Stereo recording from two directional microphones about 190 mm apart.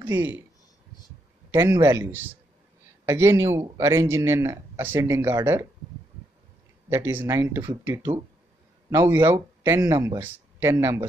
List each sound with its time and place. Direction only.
0.0 s speech: 15° right (ahead or behind)
1.5 s speech: 15° right (ahead or behind)
6.9 s speech: 15° right (ahead or behind)